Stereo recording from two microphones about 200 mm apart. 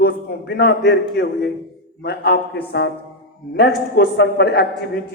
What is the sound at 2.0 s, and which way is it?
Speech, 50° left (ahead or behind).